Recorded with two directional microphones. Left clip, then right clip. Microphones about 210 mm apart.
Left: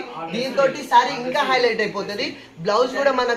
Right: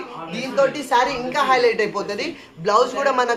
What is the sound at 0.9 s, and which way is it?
A woman's voice, 40° right (ahead or behind).